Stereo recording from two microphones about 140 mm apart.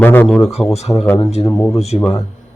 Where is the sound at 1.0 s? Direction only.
15° left (ahead or behind).